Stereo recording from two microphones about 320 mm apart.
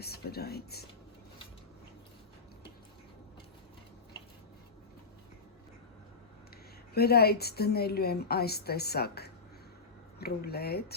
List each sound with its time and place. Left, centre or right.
0.0 s a woman's voice: left
6.9 s a woman's voice: left